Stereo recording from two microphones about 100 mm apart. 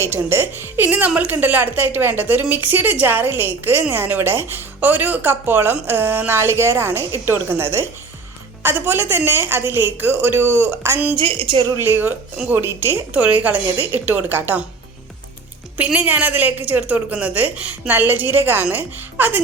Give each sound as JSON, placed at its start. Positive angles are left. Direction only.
{"t": 0.0, "sound": "a woman's voice", "side_deg": -25}
{"t": 11.2, "sound": "a woman's voice", "side_deg": -65}
{"t": 11.8, "sound": "a woman's voice", "side_deg": -20}
{"t": 15.8, "sound": "a woman's voice", "side_deg": -15}